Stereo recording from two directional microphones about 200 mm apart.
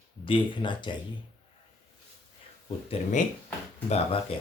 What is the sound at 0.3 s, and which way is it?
Speech, 25° left (ahead or behind).